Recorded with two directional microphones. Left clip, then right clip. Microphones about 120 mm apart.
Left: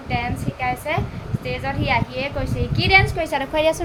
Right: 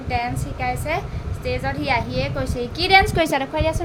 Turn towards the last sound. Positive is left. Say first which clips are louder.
# left 4 dB
turn(degrees=20)  # may be behind; listen again after turning